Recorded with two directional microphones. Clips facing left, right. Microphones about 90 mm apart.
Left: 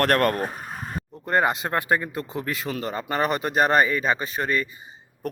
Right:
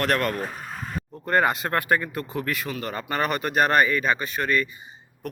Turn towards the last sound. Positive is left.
turn(degrees=30)  # may be behind; listen again after turning